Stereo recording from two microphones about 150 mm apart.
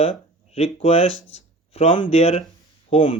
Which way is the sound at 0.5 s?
40° left (ahead or behind).